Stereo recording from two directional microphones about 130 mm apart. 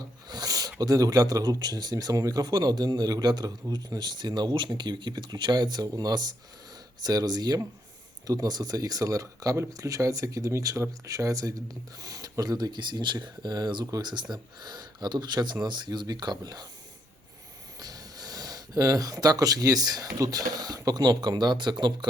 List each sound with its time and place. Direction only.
0.0 s a sound: 30° right (ahead or behind)
0.8 s speech: 30° right (ahead or behind)
17.7 s speech: 30° right (ahead or behind)